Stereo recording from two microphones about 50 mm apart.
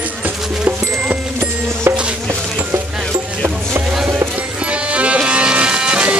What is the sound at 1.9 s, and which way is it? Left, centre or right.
Music, right.